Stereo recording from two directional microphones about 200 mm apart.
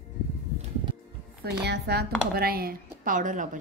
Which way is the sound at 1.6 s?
55° right (ahead or behind).